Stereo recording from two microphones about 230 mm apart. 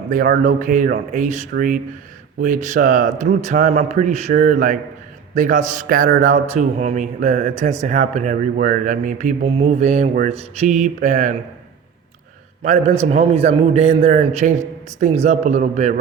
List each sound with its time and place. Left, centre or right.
0.1 s a man's voice: right
12.6 s a man's voice: right